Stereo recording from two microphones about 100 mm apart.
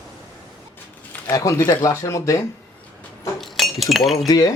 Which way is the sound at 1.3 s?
30° left (ahead or behind).